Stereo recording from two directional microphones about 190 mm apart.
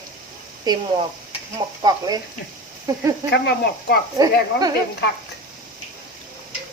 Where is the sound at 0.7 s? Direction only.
20° right (ahead or behind).